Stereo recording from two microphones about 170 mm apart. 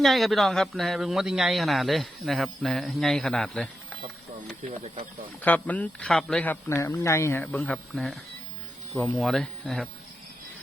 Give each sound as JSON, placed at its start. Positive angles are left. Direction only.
{"t": 0.0, "sound": "speech", "side_deg": 0}
{"t": 5.4, "sound": "speech", "side_deg": 10}